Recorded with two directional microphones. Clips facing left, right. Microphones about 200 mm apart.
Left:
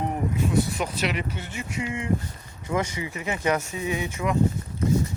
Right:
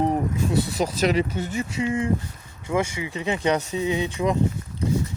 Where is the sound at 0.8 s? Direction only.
40° right (ahead or behind).